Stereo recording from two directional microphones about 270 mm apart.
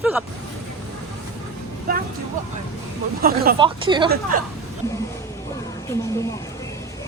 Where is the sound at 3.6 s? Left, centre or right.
Centre.